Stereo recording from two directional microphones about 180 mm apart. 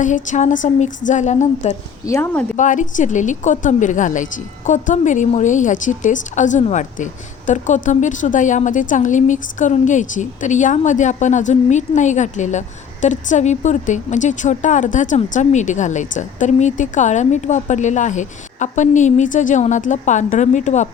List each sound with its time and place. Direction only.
0.0 s a woman's voice: 45° left (ahead or behind)
2.0 s speech: 15° left (ahead or behind)
2.6 s a woman's voice: 45° left (ahead or behind)